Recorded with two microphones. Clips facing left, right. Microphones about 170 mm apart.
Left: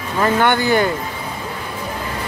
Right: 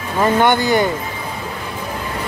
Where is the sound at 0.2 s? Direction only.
15° right (ahead or behind).